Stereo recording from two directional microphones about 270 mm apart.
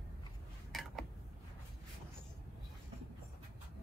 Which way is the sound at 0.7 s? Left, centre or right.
Centre.